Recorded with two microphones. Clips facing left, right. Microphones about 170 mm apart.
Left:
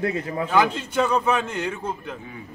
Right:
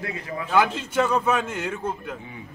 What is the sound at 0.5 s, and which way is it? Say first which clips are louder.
A man's voice: even; 10° right (ahead or behind).